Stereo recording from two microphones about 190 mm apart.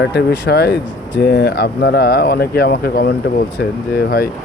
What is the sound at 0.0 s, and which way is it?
Speech, 60° left (ahead or behind).